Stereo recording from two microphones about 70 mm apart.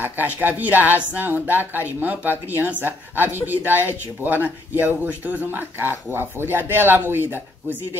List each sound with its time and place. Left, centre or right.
0.0 s speech: right